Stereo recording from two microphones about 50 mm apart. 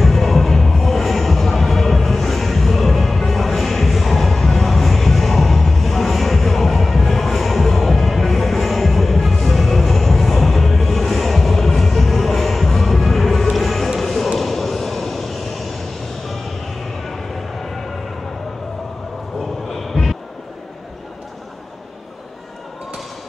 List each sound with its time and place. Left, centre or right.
0.0 s music: centre
19.7 s vehicle: centre